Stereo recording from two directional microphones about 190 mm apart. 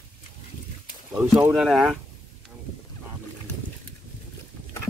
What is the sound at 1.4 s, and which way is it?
Speech, centre (ahead or behind).